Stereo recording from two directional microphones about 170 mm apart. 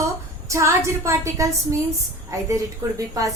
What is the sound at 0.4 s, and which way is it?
A woman's voice, 15° right (ahead or behind).